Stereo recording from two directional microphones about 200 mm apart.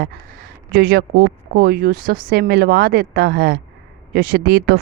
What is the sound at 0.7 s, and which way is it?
A woman's voice, 50° right (ahead or behind).